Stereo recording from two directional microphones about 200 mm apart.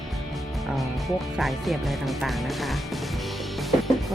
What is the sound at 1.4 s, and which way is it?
Speech, centre (ahead or behind).